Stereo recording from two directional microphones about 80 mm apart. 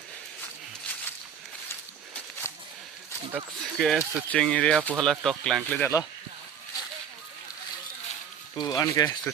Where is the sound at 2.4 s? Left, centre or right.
Left.